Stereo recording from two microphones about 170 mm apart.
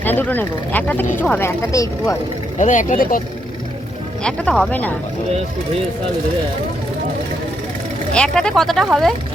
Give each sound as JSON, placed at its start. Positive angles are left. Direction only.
{"t": 0.0, "sound": "speech", "side_deg": 10}
{"t": 2.6, "sound": "speech", "side_deg": 45}
{"t": 4.2, "sound": "speech", "side_deg": 5}
{"t": 8.1, "sound": "speech", "side_deg": 5}